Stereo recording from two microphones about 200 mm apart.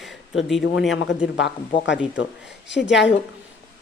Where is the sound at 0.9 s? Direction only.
60° left (ahead or behind).